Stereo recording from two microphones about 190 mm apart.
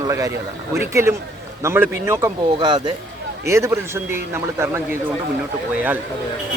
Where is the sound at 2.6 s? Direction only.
25° right (ahead or behind).